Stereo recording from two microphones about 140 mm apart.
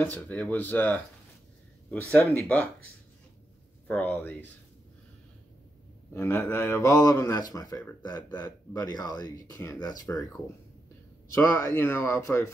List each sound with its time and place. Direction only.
0.0 s speech: 10° left (ahead or behind)
3.8 s speech: 10° left (ahead or behind)
6.1 s speech: 15° left (ahead or behind)
11.3 s speech: 20° left (ahead or behind)